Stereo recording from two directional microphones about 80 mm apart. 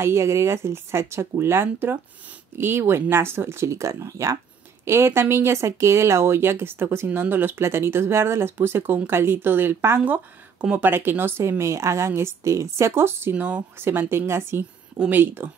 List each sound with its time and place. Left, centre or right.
0.0 s a woman's voice: right; by 10.9 s centre
10.9 s a woman's voice: right
13.3 s speech: centre
13.7 s a woman's voice: right
15.0 s speech: right